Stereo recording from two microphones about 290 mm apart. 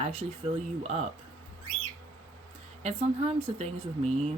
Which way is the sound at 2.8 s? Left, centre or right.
Right.